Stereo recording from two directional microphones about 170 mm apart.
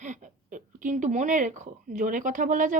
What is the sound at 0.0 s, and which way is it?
Speech, 45° right (ahead or behind).